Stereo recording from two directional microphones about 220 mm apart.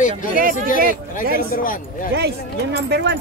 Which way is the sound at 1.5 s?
40° left (ahead or behind).